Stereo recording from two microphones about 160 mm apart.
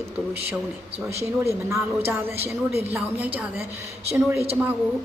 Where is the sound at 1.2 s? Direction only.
15° right (ahead or behind).